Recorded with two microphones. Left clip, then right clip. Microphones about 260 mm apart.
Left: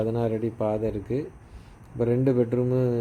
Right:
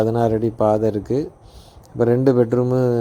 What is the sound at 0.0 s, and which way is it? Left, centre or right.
Speech, right.